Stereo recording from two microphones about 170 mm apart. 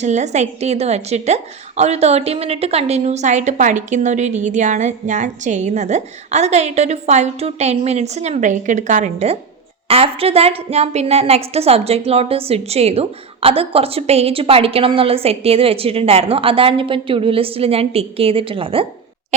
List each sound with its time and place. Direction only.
0.0 s a woman's voice: 40° right (ahead or behind)